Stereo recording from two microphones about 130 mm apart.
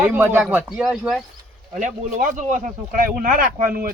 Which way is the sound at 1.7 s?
85° right.